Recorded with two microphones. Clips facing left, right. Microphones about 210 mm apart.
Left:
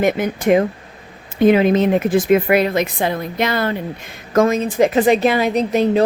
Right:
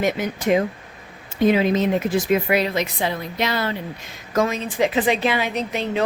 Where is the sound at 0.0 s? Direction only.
55° left (ahead or behind).